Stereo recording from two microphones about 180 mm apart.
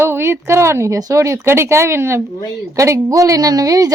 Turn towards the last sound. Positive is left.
turn(degrees=-20)  # may be behind; listen again after turning